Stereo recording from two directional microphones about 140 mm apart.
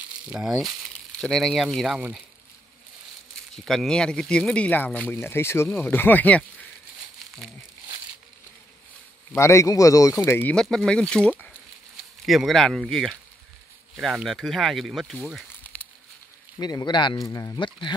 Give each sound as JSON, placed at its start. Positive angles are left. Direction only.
{"t": 0.3, "sound": "speech", "side_deg": -5}
{"t": 3.5, "sound": "speech", "side_deg": 5}
{"t": 9.3, "sound": "speech", "side_deg": 20}
{"t": 10.5, "sound": "speech", "side_deg": 5}
{"t": 15.6, "sound": "a sound", "side_deg": 10}
{"t": 16.5, "sound": "speech", "side_deg": 30}